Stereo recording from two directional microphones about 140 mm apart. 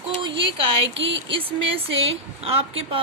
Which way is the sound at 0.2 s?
35° right (ahead or behind).